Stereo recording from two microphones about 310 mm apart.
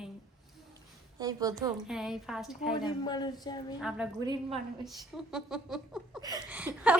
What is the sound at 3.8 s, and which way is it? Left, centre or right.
Speech, centre.